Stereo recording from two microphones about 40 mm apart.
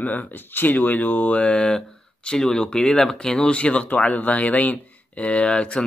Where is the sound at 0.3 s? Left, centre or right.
Left.